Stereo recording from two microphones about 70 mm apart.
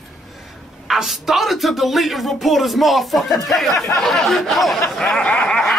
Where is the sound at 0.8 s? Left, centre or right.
Centre.